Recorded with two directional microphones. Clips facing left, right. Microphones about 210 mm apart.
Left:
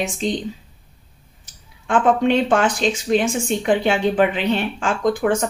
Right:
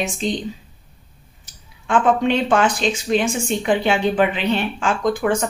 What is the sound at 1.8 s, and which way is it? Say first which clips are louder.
Speech: left 1 dB; 45° left (ahead or behind).